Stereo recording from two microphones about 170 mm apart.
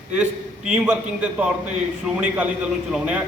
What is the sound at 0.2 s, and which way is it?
A man's voice, 5° right (ahead or behind).